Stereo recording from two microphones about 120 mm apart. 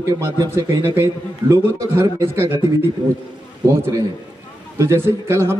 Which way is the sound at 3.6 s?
25° right (ahead or behind).